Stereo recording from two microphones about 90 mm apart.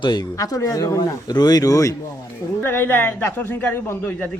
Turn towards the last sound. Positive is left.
turn(degrees=25)  # may be behind; listen again after turning